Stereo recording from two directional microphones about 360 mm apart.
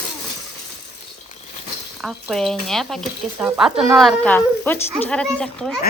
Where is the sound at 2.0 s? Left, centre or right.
Centre.